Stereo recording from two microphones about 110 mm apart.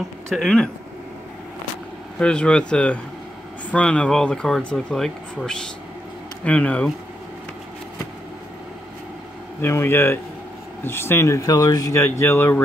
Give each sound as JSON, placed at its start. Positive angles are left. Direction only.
{"t": 0.3, "sound": "speech", "side_deg": 5}
{"t": 2.1, "sound": "speech", "side_deg": 10}
{"t": 9.6, "sound": "speech", "side_deg": 20}